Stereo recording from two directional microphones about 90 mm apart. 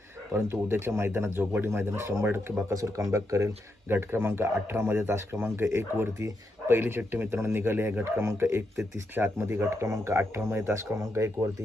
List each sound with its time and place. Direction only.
0.3 s speech: 25° right (ahead or behind)